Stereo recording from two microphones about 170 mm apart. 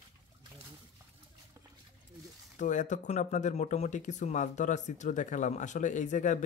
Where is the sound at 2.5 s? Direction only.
45° left (ahead or behind).